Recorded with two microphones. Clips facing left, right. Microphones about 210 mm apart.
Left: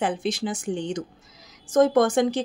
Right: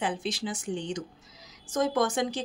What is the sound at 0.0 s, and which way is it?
Speech, 50° left (ahead or behind).